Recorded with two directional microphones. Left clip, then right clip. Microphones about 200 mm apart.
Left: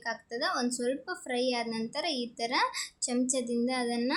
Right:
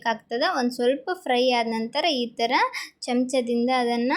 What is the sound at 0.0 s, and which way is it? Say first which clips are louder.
Speech: right 9 dB; 25° right (ahead or behind).